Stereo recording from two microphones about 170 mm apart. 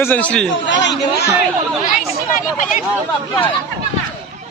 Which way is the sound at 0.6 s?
90° left.